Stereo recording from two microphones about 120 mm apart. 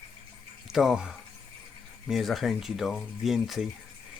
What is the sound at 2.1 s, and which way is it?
Speech, centre (ahead or behind).